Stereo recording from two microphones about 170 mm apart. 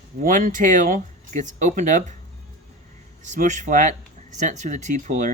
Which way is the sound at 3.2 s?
45° right (ahead or behind).